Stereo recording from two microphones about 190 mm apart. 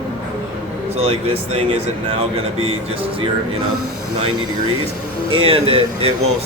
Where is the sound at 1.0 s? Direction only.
30° right (ahead or behind).